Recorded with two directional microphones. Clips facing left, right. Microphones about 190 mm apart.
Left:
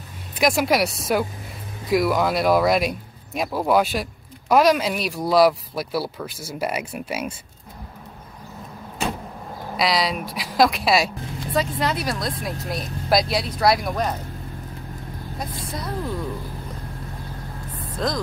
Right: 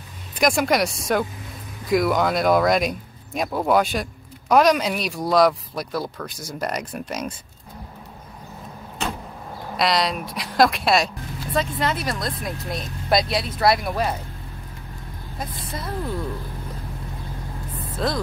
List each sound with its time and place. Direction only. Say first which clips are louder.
0.3 s speech: even; 5° left (ahead or behind)
9.8 s speech: even; centre (ahead or behind)
15.3 s speech: even; centre (ahead or behind)
17.9 s speech: right 1 dB; 5° right (ahead or behind)